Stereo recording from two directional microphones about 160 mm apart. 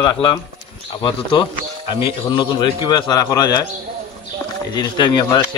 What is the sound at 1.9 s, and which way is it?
A man's voice, 30° left (ahead or behind).